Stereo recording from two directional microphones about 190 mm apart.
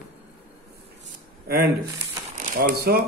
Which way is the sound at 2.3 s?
45° right (ahead or behind).